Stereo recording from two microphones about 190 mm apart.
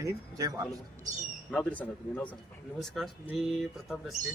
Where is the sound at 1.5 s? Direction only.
10° left (ahead or behind).